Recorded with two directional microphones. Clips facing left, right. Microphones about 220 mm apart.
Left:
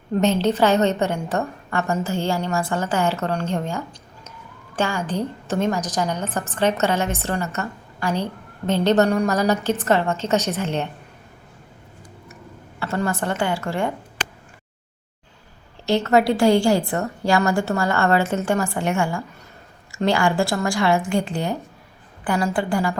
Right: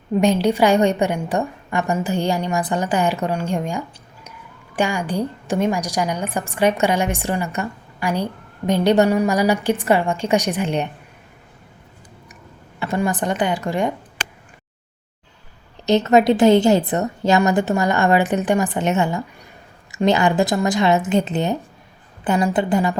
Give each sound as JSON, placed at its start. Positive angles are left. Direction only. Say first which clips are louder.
{"t": 0.1, "sound": "a woman's voice", "louder": "right 2 dB", "side_deg": -10}
{"t": 12.8, "sound": "a woman's voice", "louder": "right 3 dB", "side_deg": -15}
{"t": 15.9, "sound": "a woman's voice", "louder": "right 3 dB", "side_deg": -20}